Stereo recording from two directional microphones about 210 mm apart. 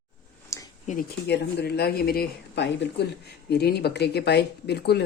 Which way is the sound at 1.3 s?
50° left (ahead or behind).